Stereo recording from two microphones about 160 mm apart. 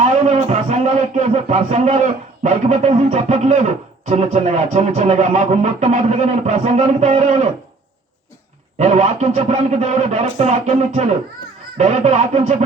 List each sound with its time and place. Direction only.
0.0 s a man's voice: 45° right (ahead or behind)
8.8 s a man's voice: 45° right (ahead or behind)